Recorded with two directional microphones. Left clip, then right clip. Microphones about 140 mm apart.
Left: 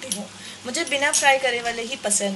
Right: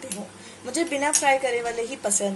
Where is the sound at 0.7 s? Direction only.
15° right (ahead or behind).